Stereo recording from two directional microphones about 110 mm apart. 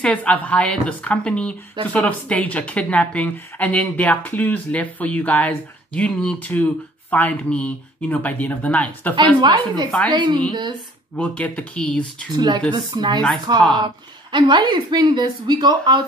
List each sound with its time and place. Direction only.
0.0 s a woman's voice: 15° left (ahead or behind)
9.1 s a woman's voice: 45° right (ahead or behind)
9.8 s a woman's voice: 10° left (ahead or behind)
10.1 s a woman's voice: 45° right (ahead or behind)
11.1 s a woman's voice: 10° left (ahead or behind)
12.3 s a woman's voice: 40° right (ahead or behind)